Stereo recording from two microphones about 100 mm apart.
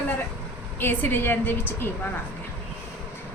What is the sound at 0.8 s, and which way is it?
A woman's voice, 20° left (ahead or behind).